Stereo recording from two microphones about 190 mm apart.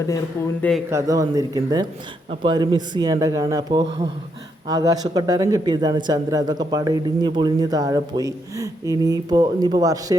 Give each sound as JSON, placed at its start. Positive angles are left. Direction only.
{"t": 0.9, "sound": "speech", "side_deg": -15}